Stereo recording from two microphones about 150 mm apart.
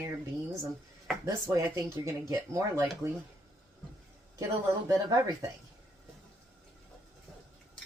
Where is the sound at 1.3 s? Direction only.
20° right (ahead or behind).